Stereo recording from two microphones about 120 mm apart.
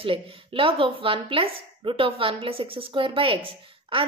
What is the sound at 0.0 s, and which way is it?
Speech, 50° right (ahead or behind).